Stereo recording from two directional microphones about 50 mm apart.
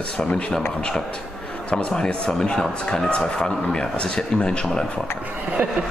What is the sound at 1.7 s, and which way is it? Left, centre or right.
Speech, left.